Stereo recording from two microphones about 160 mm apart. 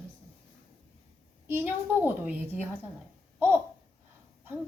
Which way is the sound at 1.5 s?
15° right (ahead or behind).